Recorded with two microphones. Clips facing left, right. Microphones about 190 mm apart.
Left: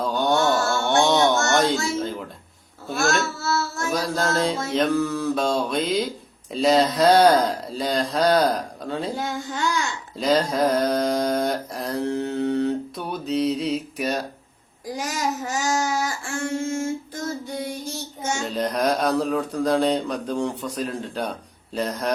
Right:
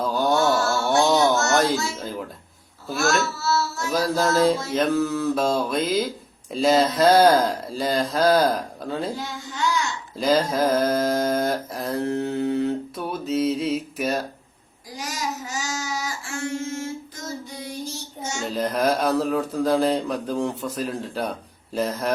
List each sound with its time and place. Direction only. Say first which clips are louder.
0.0 s a sound: even; 5° right (ahead or behind)
2.9 s mantra: even; centre (ahead or behind)
3.3 s child singing: right 1 dB; 50° left (ahead or behind)
3.9 s mantra: right 3 dB; centre (ahead or behind)
9.1 s child singing: left 4 dB; 50° left (ahead or behind)
10.2 s mantra: even; centre (ahead or behind)
14.9 s child singing: left 3 dB; 55° left (ahead or behind)
18.4 s mantra: right 1 dB; centre (ahead or behind)